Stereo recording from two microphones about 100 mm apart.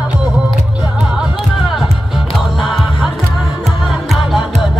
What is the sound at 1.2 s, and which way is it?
Music, centre (ahead or behind).